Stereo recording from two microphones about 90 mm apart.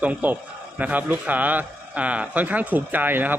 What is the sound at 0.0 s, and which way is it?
A man's voice, 15° right (ahead or behind).